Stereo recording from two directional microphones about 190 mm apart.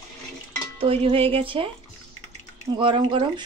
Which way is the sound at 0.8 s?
30° right (ahead or behind).